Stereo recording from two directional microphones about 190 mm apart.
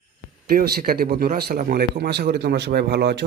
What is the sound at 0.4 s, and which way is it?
A man's voice, 50° right (ahead or behind).